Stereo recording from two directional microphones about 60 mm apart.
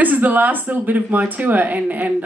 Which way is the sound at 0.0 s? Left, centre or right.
Right.